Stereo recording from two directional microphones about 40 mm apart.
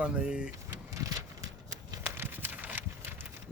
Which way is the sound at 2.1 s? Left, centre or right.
Right.